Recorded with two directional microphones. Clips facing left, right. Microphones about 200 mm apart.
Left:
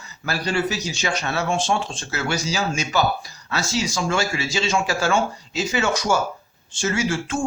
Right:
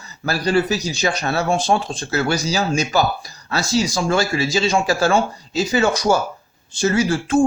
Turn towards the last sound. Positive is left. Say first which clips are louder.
# right 6 dB
turn(degrees=-35)  # may be behind; listen again after turning